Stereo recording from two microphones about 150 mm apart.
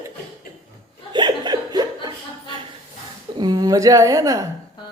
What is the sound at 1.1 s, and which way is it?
Chuckle, 30° right (ahead or behind).